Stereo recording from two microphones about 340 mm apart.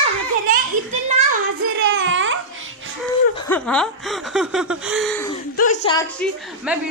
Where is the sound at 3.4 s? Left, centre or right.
Centre.